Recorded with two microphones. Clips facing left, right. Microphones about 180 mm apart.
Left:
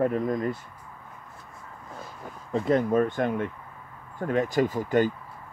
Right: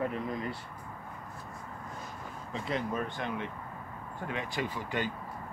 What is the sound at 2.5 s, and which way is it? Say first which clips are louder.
Speech: left 11 dB; 50° left (ahead or behind).